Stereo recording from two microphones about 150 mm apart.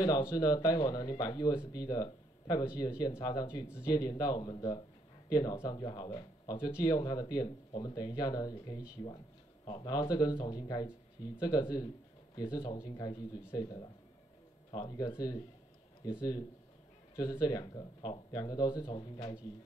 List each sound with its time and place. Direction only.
0.0 s speech: 25° left (ahead or behind)
17.1 s speech: 25° left (ahead or behind)